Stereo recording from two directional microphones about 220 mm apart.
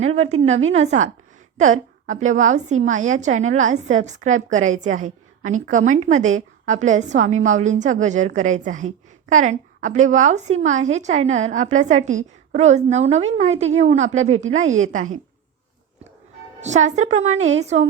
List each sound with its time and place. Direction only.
0.0 s a woman's voice: 30° right (ahead or behind)
16.6 s a woman's voice: 30° right (ahead or behind)